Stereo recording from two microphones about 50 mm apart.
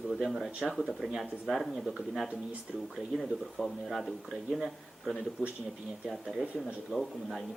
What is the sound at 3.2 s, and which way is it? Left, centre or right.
Speech, centre.